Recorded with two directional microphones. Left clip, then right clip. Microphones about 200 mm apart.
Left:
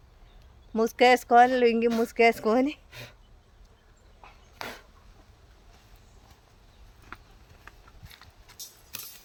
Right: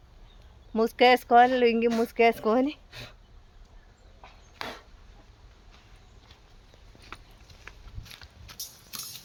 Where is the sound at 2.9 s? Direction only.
20° left (ahead or behind).